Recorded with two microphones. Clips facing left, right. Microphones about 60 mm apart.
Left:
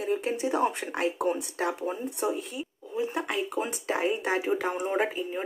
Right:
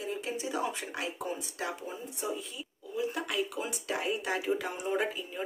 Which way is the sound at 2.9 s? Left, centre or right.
Left.